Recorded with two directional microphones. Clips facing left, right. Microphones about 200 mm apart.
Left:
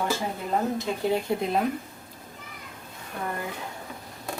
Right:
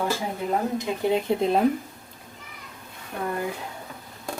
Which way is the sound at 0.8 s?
20° right (ahead or behind).